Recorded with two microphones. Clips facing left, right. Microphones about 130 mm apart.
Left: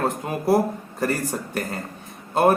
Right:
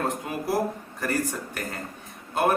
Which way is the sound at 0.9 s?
35° left (ahead or behind).